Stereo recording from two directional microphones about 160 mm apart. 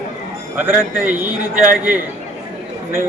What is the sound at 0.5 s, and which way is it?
A man's voice, 10° right (ahead or behind).